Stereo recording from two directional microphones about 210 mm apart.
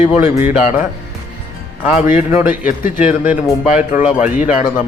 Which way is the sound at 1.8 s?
10° right (ahead or behind).